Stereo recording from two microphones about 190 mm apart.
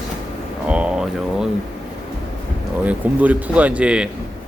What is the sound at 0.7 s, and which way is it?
Speech, 5° right (ahead or behind).